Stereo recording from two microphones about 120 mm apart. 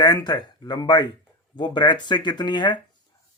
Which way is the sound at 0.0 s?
35° left (ahead or behind).